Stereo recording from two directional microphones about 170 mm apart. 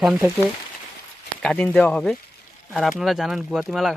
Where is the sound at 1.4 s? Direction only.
5° left (ahead or behind).